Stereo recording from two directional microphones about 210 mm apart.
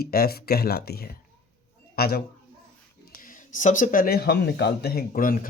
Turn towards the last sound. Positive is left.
turn(degrees=40)  # may be behind; listen again after turning